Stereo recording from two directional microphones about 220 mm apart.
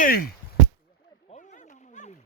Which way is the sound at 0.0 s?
40° left (ahead or behind).